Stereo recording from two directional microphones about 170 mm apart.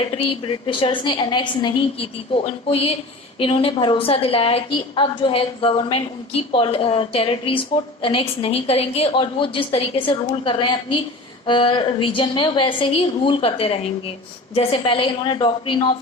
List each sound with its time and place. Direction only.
0.0 s a woman's voice: 30° left (ahead or behind)